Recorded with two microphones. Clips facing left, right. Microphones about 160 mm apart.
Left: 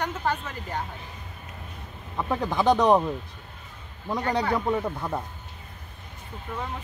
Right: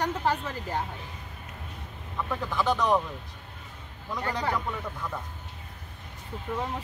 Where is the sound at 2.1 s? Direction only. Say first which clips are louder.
Left 4 dB; 35° left (ahead or behind).